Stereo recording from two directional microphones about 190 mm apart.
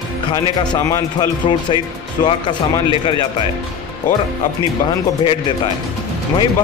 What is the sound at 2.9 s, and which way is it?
Speech, 25° left (ahead or behind).